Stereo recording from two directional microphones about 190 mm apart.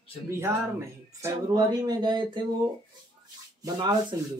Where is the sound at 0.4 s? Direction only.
15° right (ahead or behind).